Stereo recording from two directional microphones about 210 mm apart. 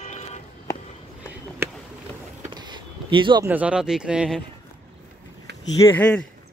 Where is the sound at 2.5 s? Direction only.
20° right (ahead or behind).